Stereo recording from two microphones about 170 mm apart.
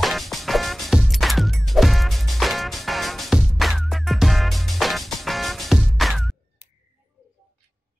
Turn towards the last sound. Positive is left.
turn(degrees=0)  # may be behind; listen again after turning